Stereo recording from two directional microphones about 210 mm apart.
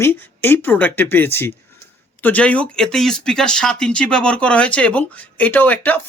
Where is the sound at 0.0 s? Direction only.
10° left (ahead or behind).